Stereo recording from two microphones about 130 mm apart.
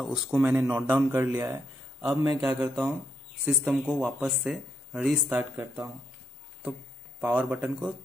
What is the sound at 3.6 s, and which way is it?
Speech, 10° right (ahead or behind).